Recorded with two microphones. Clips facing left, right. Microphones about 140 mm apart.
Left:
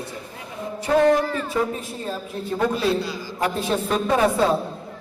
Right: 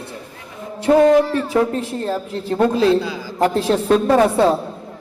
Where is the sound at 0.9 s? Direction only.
45° right (ahead or behind).